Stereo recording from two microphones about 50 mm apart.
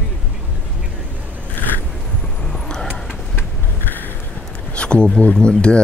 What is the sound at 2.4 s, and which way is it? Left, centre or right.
Vehicle, centre.